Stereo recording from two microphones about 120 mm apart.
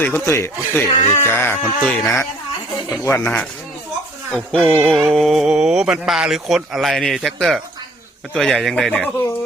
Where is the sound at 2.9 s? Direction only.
20° left (ahead or behind).